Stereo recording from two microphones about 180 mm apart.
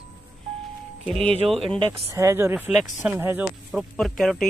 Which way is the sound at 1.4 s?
5° left (ahead or behind).